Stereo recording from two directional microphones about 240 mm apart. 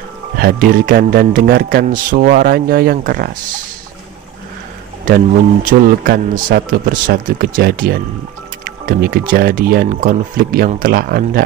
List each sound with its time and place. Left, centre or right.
0.4 s a man's voice: right
5.0 s a man's voice: right